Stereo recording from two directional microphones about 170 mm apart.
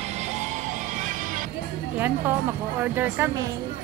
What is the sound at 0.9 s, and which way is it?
Music, 50° right (ahead or behind).